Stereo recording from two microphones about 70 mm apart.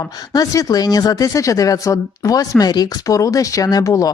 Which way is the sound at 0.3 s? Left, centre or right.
Left.